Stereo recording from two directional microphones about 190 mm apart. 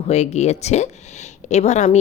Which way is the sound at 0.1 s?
35° left (ahead or behind).